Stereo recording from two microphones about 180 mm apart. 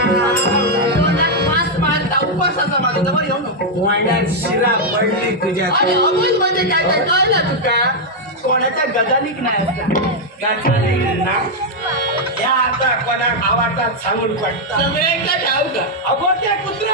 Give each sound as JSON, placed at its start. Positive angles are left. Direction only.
{"t": 0.4, "sound": "music", "side_deg": -65}
{"t": 7.2, "sound": "a woman's voice", "side_deg": -65}